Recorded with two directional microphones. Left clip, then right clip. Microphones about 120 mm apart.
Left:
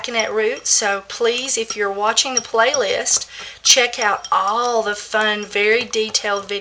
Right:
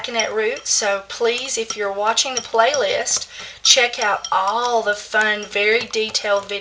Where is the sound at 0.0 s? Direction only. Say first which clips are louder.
Left 1 dB; 25° left (ahead or behind).